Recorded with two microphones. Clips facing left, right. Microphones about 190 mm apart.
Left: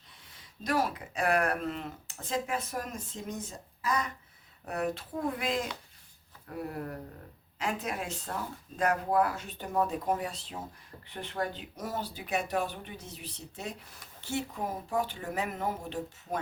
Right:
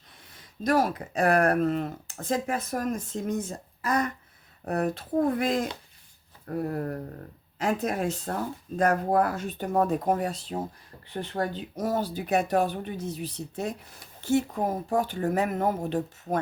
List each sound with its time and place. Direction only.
0.6 s speech: 45° right (ahead or behind)
4.6 s speech: 40° right (ahead or behind)